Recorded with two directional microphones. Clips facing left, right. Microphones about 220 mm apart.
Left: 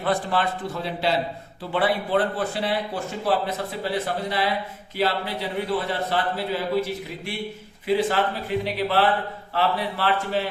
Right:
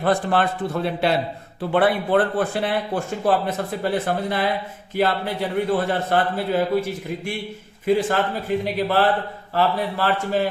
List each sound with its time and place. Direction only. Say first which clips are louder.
0.0 s speech: right 4 dB; 50° right (ahead or behind)